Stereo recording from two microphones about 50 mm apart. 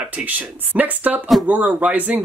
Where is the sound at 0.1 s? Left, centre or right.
Right.